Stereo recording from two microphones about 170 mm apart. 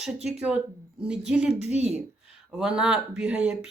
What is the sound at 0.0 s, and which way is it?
Speech, 5° right (ahead or behind).